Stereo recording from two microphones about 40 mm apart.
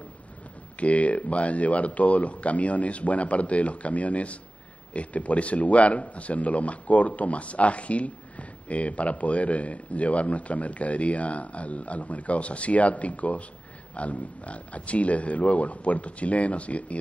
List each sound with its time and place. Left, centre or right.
0.7 s speech: left